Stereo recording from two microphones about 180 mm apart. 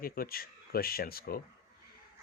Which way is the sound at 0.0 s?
55° left (ahead or behind).